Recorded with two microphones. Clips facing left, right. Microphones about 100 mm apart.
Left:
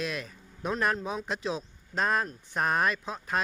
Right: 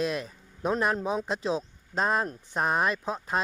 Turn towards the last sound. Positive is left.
turn(degrees=-25)  # may be behind; listen again after turning